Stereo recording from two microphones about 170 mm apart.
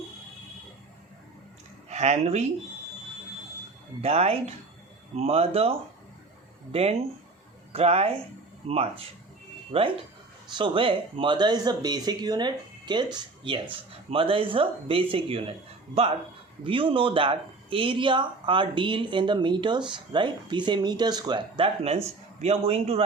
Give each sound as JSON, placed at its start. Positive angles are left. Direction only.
{"t": 1.9, "sound": "speech", "side_deg": -40}
{"t": 4.0, "sound": "speech", "side_deg": -35}
{"t": 16.6, "sound": "speech", "side_deg": -30}